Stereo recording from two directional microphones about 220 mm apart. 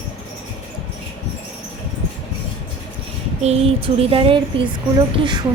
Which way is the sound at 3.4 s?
25° right (ahead or behind).